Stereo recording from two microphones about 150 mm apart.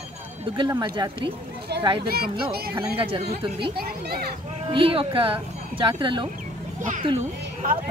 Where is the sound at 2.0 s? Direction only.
90° right.